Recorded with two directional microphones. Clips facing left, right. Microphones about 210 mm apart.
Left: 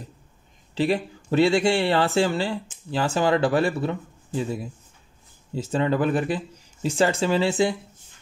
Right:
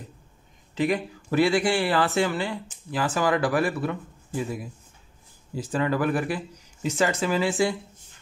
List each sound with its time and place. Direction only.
0.7 s a man's voice: 30° left (ahead or behind)